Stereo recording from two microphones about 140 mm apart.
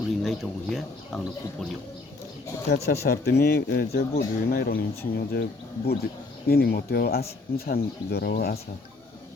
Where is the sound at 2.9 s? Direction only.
90° left.